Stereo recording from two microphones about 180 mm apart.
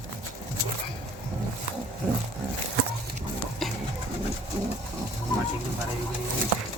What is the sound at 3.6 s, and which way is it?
Bird, centre (ahead or behind).